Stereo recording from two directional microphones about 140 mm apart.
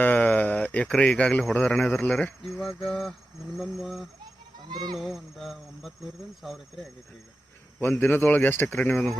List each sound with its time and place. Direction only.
0.0 s speech: 10° left (ahead or behind)
4.7 s speech: 30° right (ahead or behind)
4.9 s speech: centre (ahead or behind)
7.8 s speech: 15° left (ahead or behind)